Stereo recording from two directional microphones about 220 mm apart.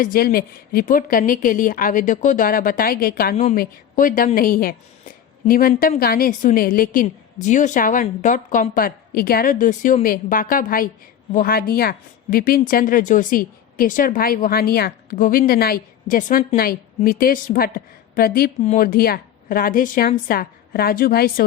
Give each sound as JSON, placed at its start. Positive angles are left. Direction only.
{"t": 0.0, "sound": "a woman's voice", "side_deg": 40}
{"t": 3.3, "sound": "a woman's voice", "side_deg": 30}